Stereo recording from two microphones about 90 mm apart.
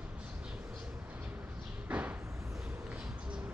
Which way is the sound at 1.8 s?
20° right (ahead or behind).